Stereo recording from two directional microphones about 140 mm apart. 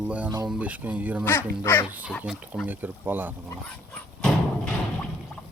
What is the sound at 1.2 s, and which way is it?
Speech, 15° left (ahead or behind).